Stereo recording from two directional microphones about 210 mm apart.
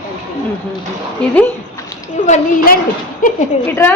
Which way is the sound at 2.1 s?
35° left (ahead or behind).